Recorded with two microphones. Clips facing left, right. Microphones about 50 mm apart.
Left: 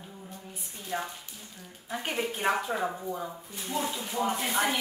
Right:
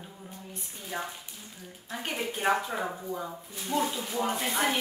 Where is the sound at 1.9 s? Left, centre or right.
Centre.